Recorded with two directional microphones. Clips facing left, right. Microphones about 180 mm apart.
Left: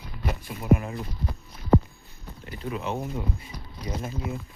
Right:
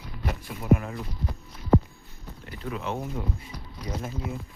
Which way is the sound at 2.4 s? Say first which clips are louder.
Left 2 dB; 15° left (ahead or behind).